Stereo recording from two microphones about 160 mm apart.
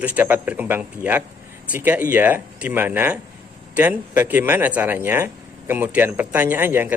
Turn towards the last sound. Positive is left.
turn(degrees=-15)  # may be behind; listen again after turning